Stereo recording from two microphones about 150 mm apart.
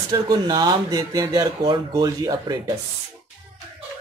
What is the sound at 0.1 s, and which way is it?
Speech, 30° right (ahead or behind).